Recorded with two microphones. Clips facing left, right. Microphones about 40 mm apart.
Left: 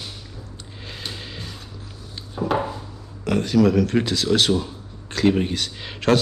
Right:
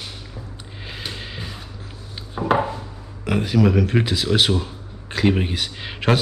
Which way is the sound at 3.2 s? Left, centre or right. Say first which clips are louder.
Left 1 dB; centre.